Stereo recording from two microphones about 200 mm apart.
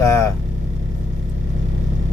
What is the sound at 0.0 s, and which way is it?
Vehicle, 15° left (ahead or behind).